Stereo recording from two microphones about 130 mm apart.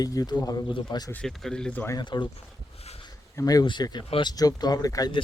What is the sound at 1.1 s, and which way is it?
Speech, 5° left (ahead or behind).